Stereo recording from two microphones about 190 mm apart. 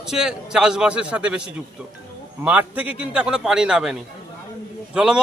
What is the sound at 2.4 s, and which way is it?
Speech, 5° right (ahead or behind).